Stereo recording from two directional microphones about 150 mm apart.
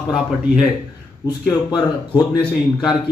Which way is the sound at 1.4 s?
25° left (ahead or behind).